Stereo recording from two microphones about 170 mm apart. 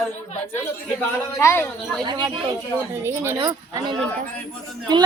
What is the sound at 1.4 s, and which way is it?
Speech, 15° left (ahead or behind).